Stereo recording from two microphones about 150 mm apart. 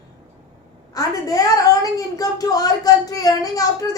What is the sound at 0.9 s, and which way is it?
A woman's voice, 25° left (ahead or behind).